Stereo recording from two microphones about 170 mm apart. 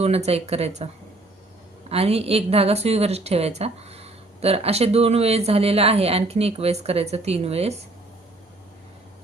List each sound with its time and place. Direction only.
0.0 s speech: 40° right (ahead or behind)
1.9 s speech: 35° right (ahead or behind)